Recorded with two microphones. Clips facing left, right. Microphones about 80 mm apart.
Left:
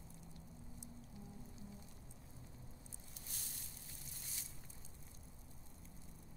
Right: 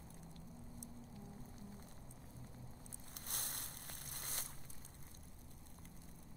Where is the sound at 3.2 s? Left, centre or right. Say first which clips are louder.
Right 8 dB; right.